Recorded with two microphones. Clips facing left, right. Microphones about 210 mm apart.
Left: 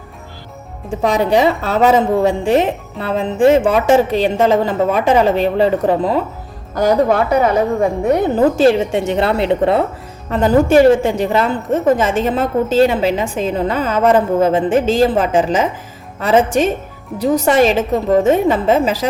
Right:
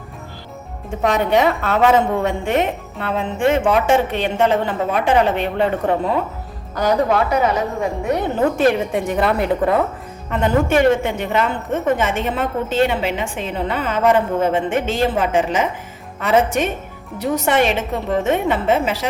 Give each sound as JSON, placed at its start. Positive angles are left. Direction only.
{"t": 0.9, "sound": "a woman's voice", "side_deg": 30}
{"t": 6.7, "sound": "speech", "side_deg": 45}
{"t": 8.4, "sound": "a woman's voice", "side_deg": 30}